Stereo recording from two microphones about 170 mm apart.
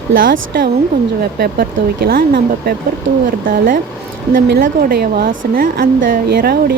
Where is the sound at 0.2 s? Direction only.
60° right (ahead or behind).